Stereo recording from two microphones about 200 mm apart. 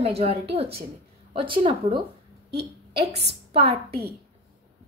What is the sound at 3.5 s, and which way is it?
Speech, 30° right (ahead or behind).